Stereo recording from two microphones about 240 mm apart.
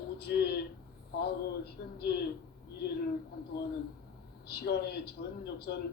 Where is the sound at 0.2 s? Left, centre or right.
Left.